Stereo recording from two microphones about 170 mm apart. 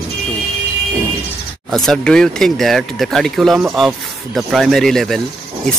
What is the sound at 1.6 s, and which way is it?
Speech, centre (ahead or behind).